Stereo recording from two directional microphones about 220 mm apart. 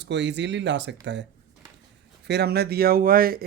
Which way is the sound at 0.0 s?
50° right (ahead or behind).